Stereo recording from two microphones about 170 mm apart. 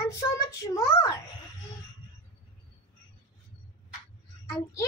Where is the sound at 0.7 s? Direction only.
20° left (ahead or behind).